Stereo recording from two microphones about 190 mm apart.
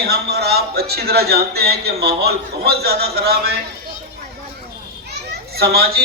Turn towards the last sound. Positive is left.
turn(degrees=-55)  # may be behind; listen again after turning